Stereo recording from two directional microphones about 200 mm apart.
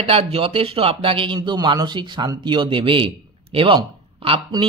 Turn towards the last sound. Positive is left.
turn(degrees=-25)  # may be behind; listen again after turning